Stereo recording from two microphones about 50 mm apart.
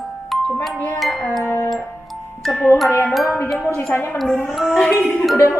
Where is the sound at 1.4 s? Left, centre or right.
Left.